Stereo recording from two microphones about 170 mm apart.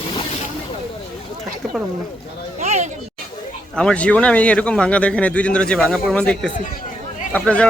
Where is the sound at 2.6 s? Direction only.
40° right (ahead or behind).